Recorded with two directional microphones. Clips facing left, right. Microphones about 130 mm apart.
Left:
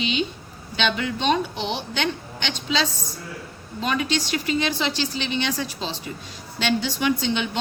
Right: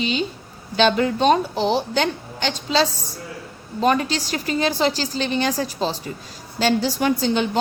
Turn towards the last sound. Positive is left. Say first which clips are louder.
# right 4 dB
turn(degrees=-40)  # may be behind; listen again after turning